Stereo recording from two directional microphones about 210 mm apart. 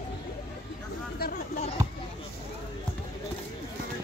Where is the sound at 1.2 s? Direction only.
45° left (ahead or behind).